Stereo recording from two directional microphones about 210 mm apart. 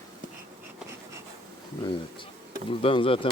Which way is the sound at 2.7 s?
25° left (ahead or behind).